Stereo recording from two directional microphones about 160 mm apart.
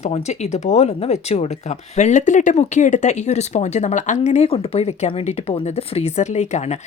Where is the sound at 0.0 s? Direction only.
45° left (ahead or behind).